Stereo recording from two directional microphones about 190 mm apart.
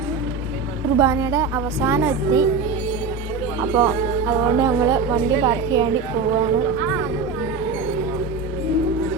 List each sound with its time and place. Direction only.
0.9 s a woman's voice: 15° right (ahead or behind)
3.6 s a woman's voice: 15° right (ahead or behind)